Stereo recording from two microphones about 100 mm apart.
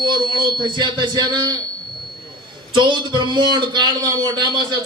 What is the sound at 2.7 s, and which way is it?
A man's voice, 50° right (ahead or behind).